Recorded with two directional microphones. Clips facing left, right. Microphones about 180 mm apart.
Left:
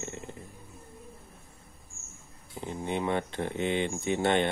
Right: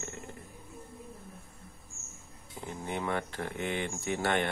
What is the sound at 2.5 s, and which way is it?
Speech, 20° left (ahead or behind).